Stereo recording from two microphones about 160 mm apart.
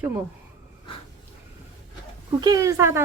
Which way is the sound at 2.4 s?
20° right (ahead or behind).